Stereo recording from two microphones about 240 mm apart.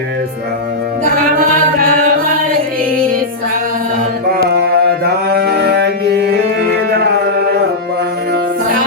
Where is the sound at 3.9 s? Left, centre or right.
Right.